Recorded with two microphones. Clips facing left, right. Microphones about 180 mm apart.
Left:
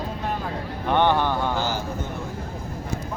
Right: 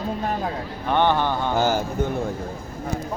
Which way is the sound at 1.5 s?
50° right (ahead or behind).